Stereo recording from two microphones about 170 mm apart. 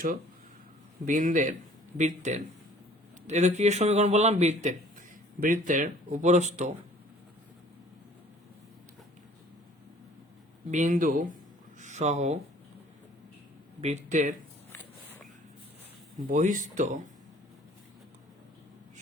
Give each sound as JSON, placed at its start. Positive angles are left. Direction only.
{"t": 1.0, "sound": "a man's voice", "side_deg": -50}
{"t": 10.7, "sound": "speech", "side_deg": -45}
{"t": 13.8, "sound": "speech", "side_deg": -45}
{"t": 16.1, "sound": "speech", "side_deg": -50}